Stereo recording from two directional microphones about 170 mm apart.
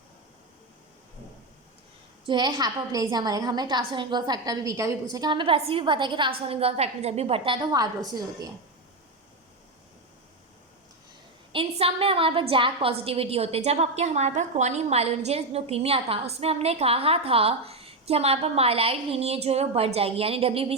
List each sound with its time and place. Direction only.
2.2 s a woman's voice: 25° right (ahead or behind)
11.5 s a woman's voice: 35° right (ahead or behind)